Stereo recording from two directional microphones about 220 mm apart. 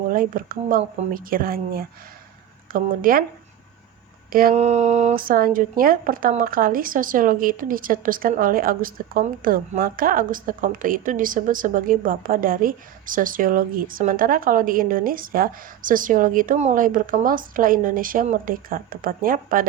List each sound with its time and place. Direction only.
0.1 s speech: 40° right (ahead or behind)
4.3 s speech: 40° right (ahead or behind)